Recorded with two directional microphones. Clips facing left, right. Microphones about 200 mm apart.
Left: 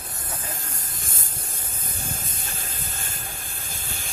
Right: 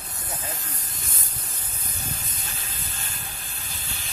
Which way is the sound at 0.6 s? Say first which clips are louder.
Left 1 dB; 45° left (ahead or behind).